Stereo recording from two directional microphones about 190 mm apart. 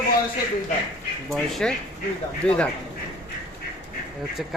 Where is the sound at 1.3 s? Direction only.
Centre (ahead or behind).